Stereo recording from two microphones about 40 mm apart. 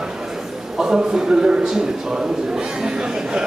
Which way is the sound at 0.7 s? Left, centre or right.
Centre.